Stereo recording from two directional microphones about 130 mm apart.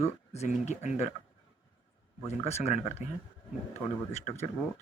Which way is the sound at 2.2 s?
55° left (ahead or behind).